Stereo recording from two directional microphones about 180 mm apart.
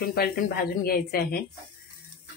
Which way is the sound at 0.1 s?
60° left (ahead or behind).